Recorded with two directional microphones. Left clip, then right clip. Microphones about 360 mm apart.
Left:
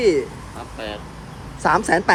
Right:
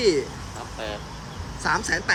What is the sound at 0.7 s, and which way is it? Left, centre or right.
Vehicle, left.